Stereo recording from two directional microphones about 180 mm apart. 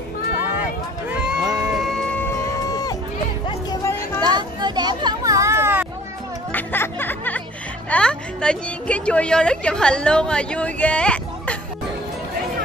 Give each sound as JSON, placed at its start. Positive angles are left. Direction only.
{"t": 1.4, "sound": "music", "side_deg": -20}
{"t": 1.7, "sound": "music", "side_deg": 0}
{"t": 4.2, "sound": "a sound", "side_deg": -25}
{"t": 6.5, "sound": "music", "side_deg": 10}
{"t": 7.9, "sound": "a woman's voice", "side_deg": 5}